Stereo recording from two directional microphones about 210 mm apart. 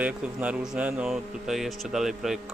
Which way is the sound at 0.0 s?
5° right (ahead or behind).